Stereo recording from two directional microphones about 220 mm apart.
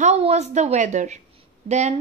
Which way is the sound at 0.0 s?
30° right (ahead or behind).